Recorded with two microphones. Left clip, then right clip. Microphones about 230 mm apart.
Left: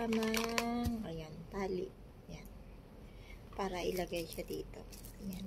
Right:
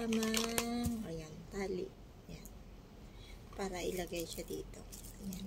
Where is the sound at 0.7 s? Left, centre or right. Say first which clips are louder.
Left 1 dB; centre.